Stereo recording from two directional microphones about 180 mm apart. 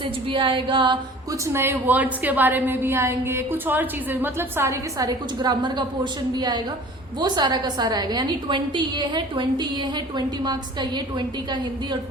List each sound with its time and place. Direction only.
0.3 s a woman's voice: 30° right (ahead or behind)
1.5 s a woman's voice: 10° right (ahead or behind)